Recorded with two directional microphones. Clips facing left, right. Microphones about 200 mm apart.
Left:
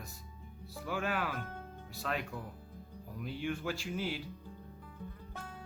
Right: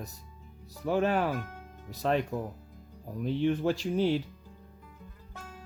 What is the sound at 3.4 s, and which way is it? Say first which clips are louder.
Speech: right 9 dB; 40° right (ahead or behind).